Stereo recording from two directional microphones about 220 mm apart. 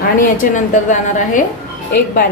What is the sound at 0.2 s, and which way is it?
A woman's voice, 35° left (ahead or behind).